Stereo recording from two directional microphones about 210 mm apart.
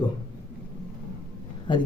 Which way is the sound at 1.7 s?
20° left (ahead or behind).